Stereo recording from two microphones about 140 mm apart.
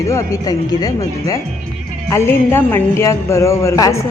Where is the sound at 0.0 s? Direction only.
20° left (ahead or behind).